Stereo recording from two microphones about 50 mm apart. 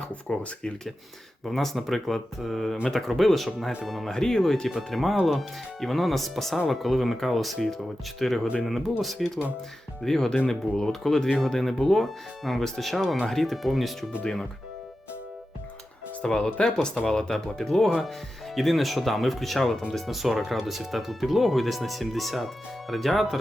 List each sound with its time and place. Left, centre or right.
0.3 s speech: centre
1.5 s speech: centre
4.1 s speech: centre
4.8 s speech: centre
16.2 s speech: centre